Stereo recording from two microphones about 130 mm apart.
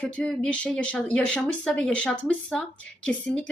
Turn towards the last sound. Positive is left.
turn(degrees=10)  # may be behind; listen again after turning